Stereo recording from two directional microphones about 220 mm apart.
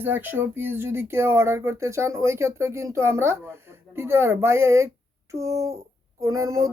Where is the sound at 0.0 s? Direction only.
10° right (ahead or behind).